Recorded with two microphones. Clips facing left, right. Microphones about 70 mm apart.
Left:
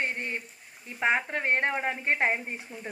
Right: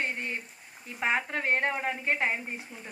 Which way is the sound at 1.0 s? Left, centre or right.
Centre.